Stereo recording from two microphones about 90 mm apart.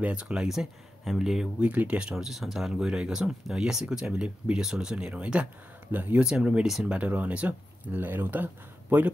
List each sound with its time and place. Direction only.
0.0 s speech: 10° right (ahead or behind)
1.6 s speech: 15° right (ahead or behind)
6.2 s speech: 10° right (ahead or behind)